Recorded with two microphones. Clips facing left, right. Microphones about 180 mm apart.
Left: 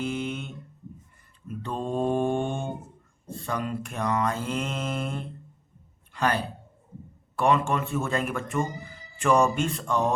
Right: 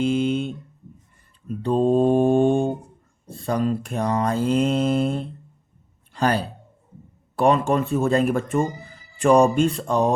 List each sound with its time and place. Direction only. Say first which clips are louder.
0.0 s a sound: right 9 dB; 30° right (ahead or behind)
1.5 s mantra: right 12 dB; 35° right (ahead or behind)
3.2 s speech: right 8 dB; 35° right (ahead or behind)